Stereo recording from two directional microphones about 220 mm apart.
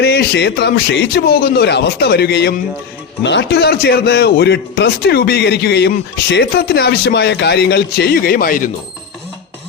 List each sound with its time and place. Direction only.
0.0 s a man's voice: 50° left (ahead or behind)